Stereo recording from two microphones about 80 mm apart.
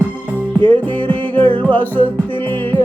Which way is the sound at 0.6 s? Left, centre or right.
Right.